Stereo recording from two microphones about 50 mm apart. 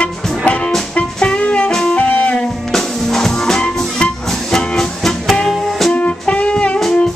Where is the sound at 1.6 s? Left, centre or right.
Centre.